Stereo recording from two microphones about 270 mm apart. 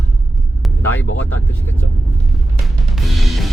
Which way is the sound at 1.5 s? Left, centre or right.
Centre.